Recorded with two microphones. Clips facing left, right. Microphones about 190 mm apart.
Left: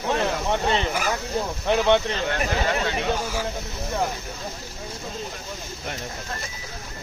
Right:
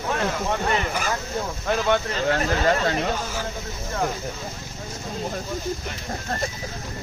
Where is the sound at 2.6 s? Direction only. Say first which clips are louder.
Right 3 dB; 40° right (ahead or behind).